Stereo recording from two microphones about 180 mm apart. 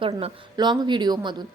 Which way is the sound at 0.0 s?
25° right (ahead or behind).